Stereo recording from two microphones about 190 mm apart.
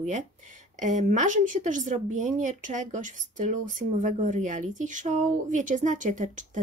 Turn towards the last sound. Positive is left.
turn(degrees=-40)  # may be behind; listen again after turning